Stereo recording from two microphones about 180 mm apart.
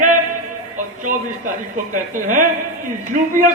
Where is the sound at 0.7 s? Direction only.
45° right (ahead or behind).